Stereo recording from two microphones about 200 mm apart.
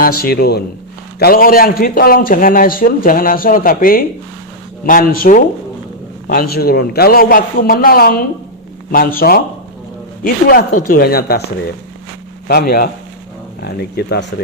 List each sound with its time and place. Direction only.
0.0 s a man's voice: 50° left (ahead or behind)
12.5 s a man's voice: 50° left (ahead or behind)